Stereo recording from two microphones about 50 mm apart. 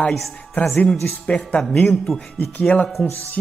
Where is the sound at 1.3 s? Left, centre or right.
Centre.